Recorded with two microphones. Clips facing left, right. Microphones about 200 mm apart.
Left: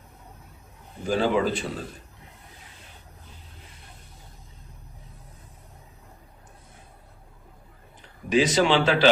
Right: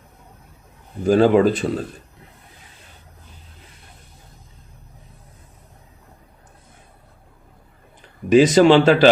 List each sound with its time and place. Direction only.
1.0 s speech: 50° right (ahead or behind)
8.3 s speech: 45° right (ahead or behind)